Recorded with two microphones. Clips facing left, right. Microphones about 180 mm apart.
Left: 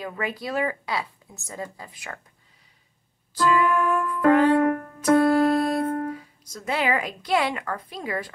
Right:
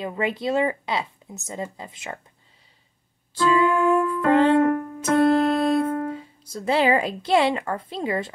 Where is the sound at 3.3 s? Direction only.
25° right (ahead or behind).